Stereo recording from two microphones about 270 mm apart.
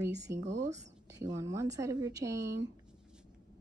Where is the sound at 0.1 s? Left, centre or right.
Right.